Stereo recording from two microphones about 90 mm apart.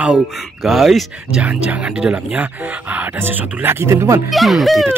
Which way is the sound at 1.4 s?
15° right (ahead or behind).